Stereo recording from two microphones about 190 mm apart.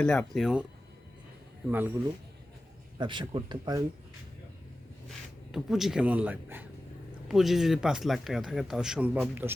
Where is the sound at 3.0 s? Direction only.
25° right (ahead or behind).